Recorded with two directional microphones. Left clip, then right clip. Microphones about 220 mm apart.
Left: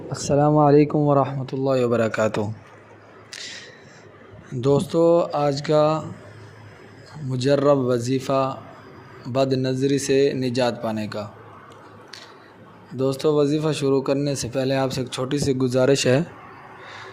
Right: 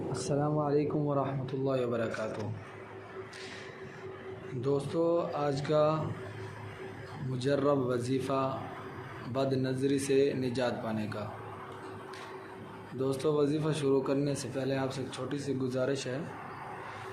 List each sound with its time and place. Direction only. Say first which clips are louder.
0.1 s speech: left 14 dB; 35° left (ahead or behind)
4.6 s speech: left 12 dB; 40° left (ahead or behind)
7.3 s speech: left 11 dB; 35° left (ahead or behind)
13.0 s speech: left 10 dB; 35° left (ahead or behind)